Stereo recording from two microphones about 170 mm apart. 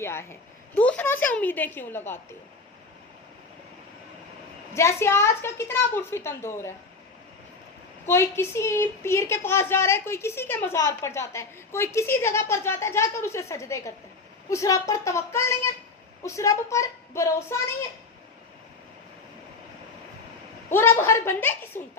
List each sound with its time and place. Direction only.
0.0 s a woman's voice: 15° left (ahead or behind)
4.7 s a woman's voice: 15° left (ahead or behind)
8.0 s a woman's voice: 15° left (ahead or behind)
20.7 s a woman's voice: 15° left (ahead or behind)